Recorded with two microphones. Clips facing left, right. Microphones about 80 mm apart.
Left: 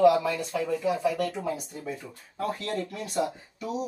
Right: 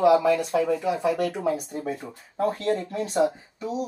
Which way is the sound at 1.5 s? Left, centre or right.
Right.